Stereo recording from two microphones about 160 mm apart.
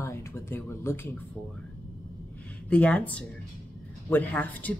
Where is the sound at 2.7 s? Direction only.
10° left (ahead or behind).